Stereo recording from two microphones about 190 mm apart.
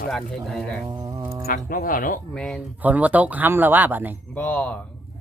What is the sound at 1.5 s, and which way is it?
Speech, 50° left (ahead or behind).